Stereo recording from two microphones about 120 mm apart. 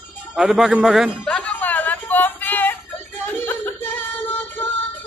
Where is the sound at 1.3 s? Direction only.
10° left (ahead or behind).